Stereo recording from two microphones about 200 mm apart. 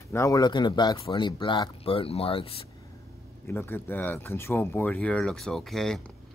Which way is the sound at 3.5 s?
10° left (ahead or behind).